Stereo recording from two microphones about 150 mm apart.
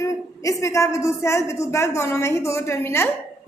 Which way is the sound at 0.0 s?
20° left (ahead or behind).